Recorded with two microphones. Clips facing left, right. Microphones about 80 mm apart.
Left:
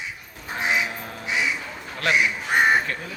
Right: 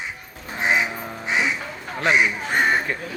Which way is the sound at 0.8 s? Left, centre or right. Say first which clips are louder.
Right 3 dB; centre.